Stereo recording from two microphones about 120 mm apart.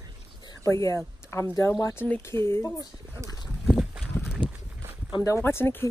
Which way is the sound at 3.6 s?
5° right (ahead or behind).